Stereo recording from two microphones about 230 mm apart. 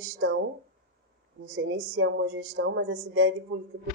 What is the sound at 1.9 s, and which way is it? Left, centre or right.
A woman's voice, right.